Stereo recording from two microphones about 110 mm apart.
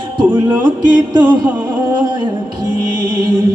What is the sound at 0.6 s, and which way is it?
Speech, 40° right (ahead or behind).